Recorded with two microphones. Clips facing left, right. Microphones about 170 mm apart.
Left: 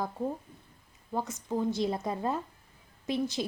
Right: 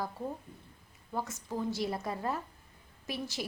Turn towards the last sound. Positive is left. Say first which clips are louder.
# left 8 dB
turn(degrees=20)  # may be behind; listen again after turning